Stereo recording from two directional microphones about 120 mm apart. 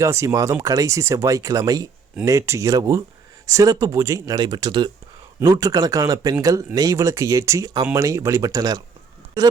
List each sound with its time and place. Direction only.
0.0 s speech: 25° right (ahead or behind)